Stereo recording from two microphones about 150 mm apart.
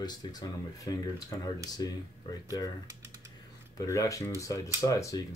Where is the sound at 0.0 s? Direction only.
30° left (ahead or behind).